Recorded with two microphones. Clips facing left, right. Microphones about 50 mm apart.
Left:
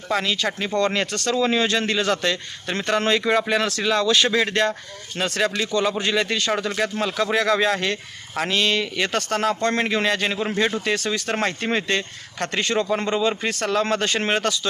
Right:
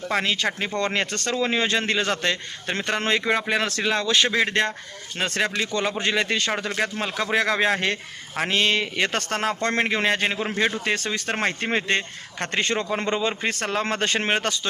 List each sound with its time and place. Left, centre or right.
0.1 s speech: right
0.9 s speech: right
2.7 s speech: centre
13.1 s speech: right